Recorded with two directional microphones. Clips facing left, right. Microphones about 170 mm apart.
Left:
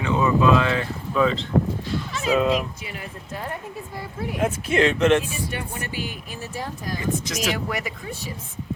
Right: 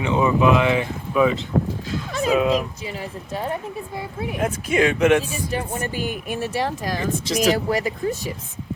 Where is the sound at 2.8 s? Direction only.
30° right (ahead or behind).